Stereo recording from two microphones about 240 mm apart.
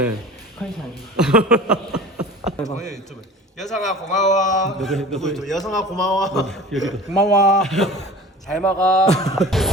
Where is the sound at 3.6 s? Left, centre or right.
Centre.